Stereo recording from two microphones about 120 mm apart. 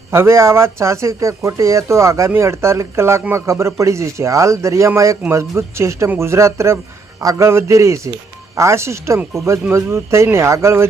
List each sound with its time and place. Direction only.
0.1 s speech: 25° right (ahead or behind)